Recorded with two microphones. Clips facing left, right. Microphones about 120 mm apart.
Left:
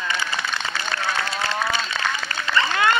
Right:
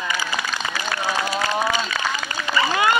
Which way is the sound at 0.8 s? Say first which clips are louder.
Right 3 dB; 15° right (ahead or behind).